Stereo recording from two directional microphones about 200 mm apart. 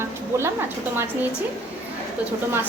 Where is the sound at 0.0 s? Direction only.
15° right (ahead or behind).